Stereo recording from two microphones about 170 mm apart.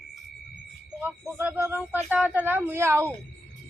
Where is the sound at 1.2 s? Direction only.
10° right (ahead or behind).